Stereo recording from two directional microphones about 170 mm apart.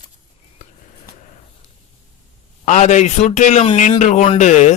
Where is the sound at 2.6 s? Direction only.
45° left (ahead or behind).